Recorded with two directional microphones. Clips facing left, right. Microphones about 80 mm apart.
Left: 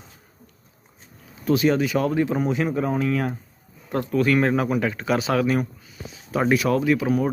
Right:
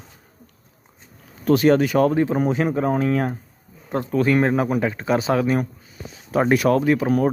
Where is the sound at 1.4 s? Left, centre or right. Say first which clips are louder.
Right 4 dB; right.